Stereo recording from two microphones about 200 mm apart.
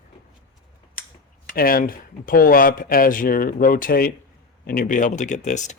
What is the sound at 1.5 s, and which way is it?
Speech, 45° left (ahead or behind).